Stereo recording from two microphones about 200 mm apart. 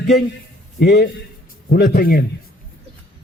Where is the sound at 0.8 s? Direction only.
55° left (ahead or behind).